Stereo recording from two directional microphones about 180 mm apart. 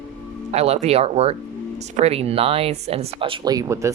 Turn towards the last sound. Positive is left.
turn(degrees=-15)  # may be behind; listen again after turning